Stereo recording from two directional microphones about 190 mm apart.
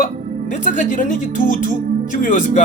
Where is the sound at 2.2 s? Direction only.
45° left (ahead or behind).